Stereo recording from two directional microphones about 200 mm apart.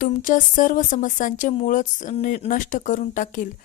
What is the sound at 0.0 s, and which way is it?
A woman's voice, 40° left (ahead or behind).